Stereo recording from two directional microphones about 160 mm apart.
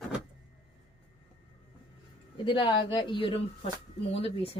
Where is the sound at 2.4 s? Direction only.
30° left (ahead or behind).